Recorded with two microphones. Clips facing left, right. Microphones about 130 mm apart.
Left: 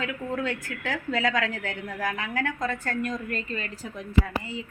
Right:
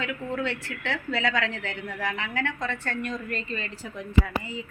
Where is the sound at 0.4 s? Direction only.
45° left (ahead or behind).